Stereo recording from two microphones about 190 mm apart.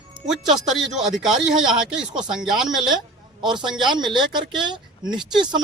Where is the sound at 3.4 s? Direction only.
25° right (ahead or behind).